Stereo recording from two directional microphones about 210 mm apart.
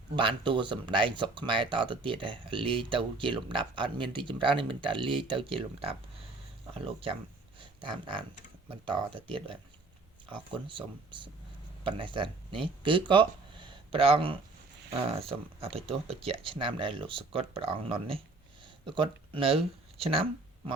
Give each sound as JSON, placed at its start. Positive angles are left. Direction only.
{"t": 0.2, "sound": "speech", "side_deg": -25}
{"t": 7.6, "sound": "a sound", "side_deg": -25}
{"t": 8.7, "sound": "speech", "side_deg": -25}